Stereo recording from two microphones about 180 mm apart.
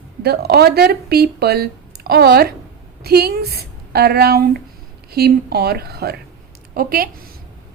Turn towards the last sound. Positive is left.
turn(degrees=-55)  # may be behind; listen again after turning